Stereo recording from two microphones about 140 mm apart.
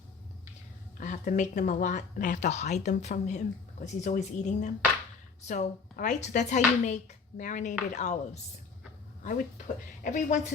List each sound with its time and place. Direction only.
0.9 s speech: 70° left (ahead or behind)
10.0 s speech: 65° left (ahead or behind)